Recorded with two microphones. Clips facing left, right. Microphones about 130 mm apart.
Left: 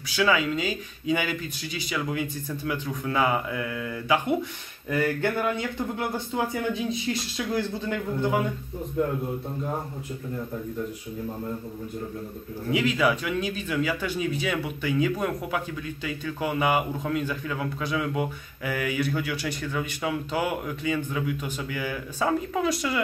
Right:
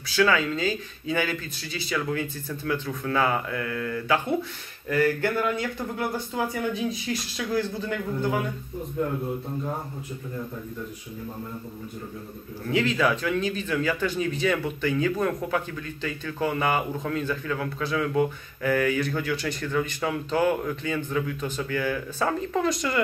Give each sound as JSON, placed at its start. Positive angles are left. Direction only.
{"t": 0.1, "sound": "speech", "side_deg": 15}
{"t": 12.7, "sound": "speech", "side_deg": 10}